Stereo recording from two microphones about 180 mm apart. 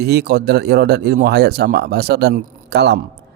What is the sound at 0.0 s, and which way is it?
A man's voice, 65° right (ahead or behind).